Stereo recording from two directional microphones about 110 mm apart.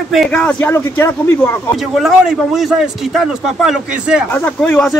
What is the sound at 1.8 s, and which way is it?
Speech, 5° right (ahead or behind).